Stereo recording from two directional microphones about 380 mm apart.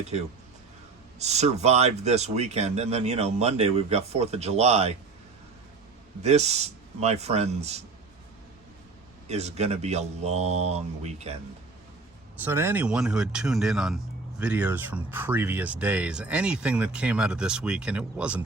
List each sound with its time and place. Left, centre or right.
1.2 s speech: centre
6.2 s speech: centre
9.3 s speech: centre
12.4 s speech: centre